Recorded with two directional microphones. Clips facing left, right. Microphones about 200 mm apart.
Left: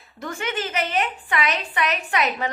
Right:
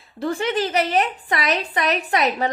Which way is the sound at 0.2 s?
35° right (ahead or behind).